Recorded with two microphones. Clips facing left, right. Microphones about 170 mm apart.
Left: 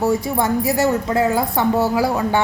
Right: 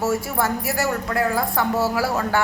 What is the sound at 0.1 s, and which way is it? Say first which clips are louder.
A woman's voice: left 4 dB; 20° left (ahead or behind).